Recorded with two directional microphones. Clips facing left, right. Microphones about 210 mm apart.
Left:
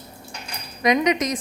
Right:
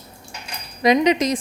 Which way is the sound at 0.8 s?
30° right (ahead or behind).